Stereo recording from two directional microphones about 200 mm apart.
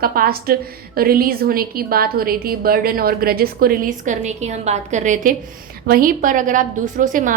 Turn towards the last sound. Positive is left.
turn(degrees=-40)  # may be behind; listen again after turning